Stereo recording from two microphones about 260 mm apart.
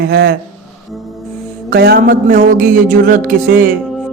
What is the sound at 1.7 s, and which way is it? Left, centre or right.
Speech, right.